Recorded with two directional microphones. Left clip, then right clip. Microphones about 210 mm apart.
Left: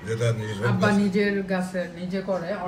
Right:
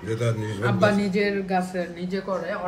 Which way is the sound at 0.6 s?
30° right (ahead or behind).